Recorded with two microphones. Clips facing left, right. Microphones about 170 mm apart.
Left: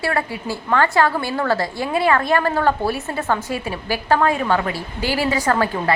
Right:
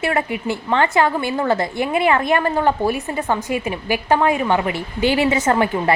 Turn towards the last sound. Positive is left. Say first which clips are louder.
# right 2 dB
turn(degrees=-20)  # may be behind; listen again after turning